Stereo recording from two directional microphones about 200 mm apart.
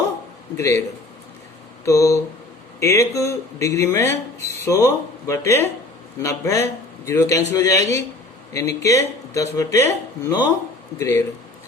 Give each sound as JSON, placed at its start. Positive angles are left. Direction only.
{"t": 0.5, "sound": "speech", "side_deg": 15}
{"t": 1.8, "sound": "speech", "side_deg": 15}